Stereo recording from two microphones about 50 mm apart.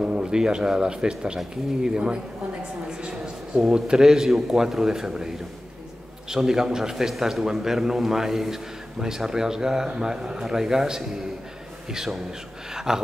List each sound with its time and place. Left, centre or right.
0.0 s a man's voice: centre
3.5 s a man's voice: centre
6.3 s a man's voice: centre